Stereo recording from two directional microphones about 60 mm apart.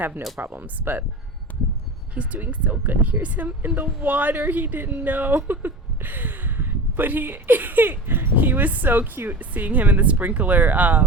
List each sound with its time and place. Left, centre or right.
0.3 s speech: right
1.5 s a sound: left
2.1 s speech: right